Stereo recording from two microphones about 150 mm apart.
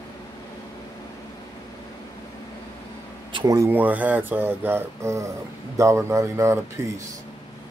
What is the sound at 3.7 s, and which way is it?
A man's voice, 10° right (ahead or behind).